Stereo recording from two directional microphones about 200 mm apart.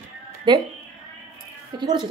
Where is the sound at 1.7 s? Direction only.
20° right (ahead or behind).